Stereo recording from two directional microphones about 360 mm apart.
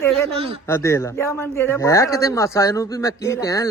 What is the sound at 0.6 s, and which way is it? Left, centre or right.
Speech, centre.